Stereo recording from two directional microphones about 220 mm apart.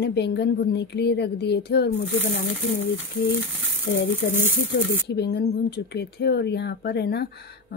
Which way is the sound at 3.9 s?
65° left (ahead or behind).